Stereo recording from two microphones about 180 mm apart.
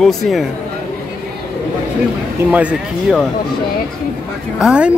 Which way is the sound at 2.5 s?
5° right (ahead or behind).